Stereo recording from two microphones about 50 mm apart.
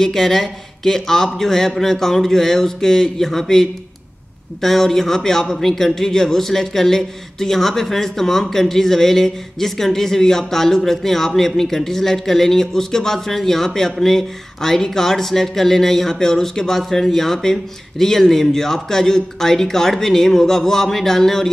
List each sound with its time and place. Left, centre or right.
0.0 s a man's voice: centre